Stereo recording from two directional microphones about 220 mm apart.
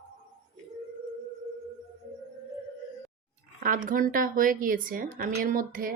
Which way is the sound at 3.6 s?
35° right (ahead or behind).